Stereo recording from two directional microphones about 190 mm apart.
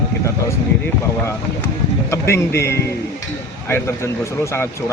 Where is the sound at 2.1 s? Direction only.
15° left (ahead or behind).